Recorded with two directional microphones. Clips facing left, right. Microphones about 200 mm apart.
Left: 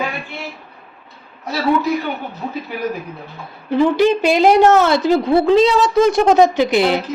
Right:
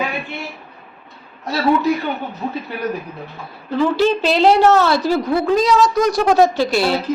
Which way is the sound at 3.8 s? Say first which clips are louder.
Left 2 dB; 15° left (ahead or behind).